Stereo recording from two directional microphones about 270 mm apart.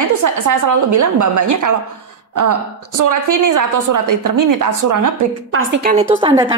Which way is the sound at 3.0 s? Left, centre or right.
Right.